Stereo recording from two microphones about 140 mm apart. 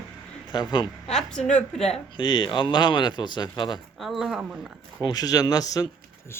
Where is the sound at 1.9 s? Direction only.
35° left (ahead or behind).